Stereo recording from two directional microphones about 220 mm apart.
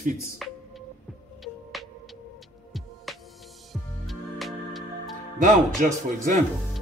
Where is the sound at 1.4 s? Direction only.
Centre (ahead or behind).